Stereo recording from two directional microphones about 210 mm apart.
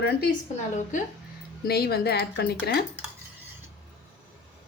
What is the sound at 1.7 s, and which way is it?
A woman's voice, 50° left (ahead or behind).